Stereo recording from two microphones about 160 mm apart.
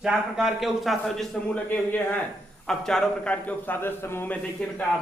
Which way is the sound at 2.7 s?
5° left (ahead or behind).